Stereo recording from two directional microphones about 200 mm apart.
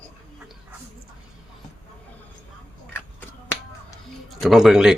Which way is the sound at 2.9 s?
10° left (ahead or behind).